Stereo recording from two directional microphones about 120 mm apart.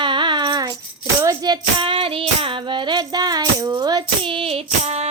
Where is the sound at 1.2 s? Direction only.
30° right (ahead or behind).